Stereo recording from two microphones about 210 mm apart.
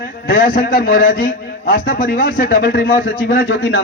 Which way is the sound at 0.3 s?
40° left (ahead or behind).